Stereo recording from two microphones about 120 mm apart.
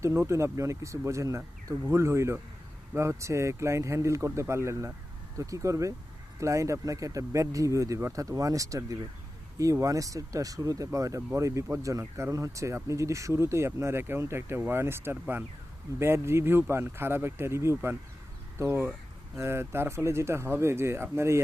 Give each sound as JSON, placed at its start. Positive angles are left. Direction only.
{"t": 0.0, "sound": "speech", "side_deg": -25}